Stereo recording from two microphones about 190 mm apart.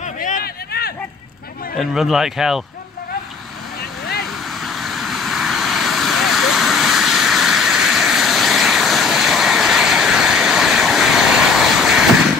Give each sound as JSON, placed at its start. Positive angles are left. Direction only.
{"t": 0.2, "sound": "a sound", "side_deg": 50}
{"t": 1.8, "sound": "speech", "side_deg": 0}
{"t": 4.6, "sound": "vehicle", "side_deg": 0}